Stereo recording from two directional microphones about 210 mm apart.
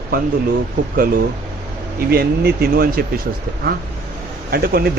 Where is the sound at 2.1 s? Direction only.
45° right (ahead or behind).